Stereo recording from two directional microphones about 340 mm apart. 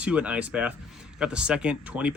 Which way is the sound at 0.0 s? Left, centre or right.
Centre.